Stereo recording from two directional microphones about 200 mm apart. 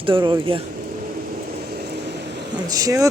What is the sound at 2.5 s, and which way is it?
Speech, 20° right (ahead or behind).